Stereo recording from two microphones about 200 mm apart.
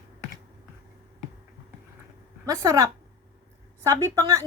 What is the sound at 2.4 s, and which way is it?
A woman's voice, 15° right (ahead or behind).